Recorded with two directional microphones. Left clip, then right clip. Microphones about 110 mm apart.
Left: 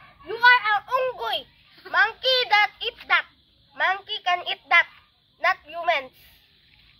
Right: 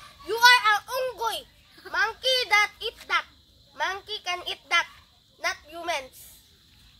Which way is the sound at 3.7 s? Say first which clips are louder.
Left 6 dB; 15° right (ahead or behind).